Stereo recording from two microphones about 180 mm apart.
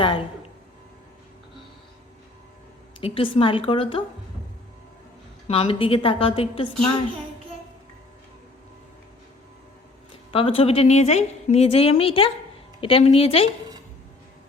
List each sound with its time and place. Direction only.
0.0 s speech: 30° left (ahead or behind)
3.0 s a woman's voice: 30° left (ahead or behind)
5.5 s a woman's voice: 30° left (ahead or behind)
10.1 s a woman's voice: 30° left (ahead or behind)